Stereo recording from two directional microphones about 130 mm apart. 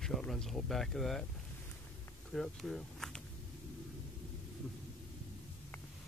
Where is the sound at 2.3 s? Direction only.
5° left (ahead or behind).